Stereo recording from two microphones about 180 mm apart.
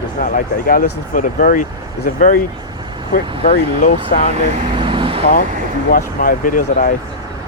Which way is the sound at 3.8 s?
45° left (ahead or behind).